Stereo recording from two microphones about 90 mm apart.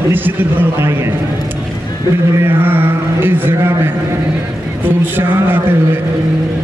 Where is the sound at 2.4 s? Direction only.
25° right (ahead or behind).